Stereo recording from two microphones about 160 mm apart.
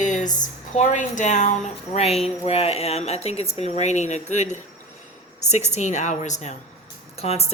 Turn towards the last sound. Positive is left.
turn(degrees=40)  # may be behind; listen again after turning